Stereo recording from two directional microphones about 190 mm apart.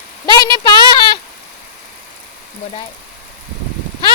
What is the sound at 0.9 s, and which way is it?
Sheep, 25° left (ahead or behind).